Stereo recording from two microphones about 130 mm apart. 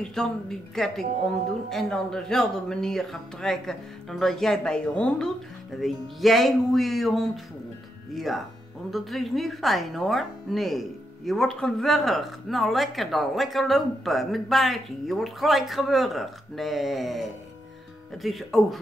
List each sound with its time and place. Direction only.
0.0 s speech: 5° left (ahead or behind)